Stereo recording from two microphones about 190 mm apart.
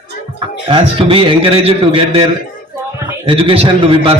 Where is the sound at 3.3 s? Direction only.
30° right (ahead or behind).